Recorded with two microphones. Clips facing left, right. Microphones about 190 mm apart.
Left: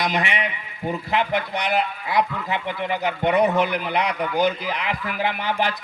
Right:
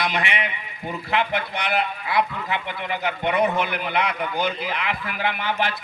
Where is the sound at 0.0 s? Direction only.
40° left (ahead or behind).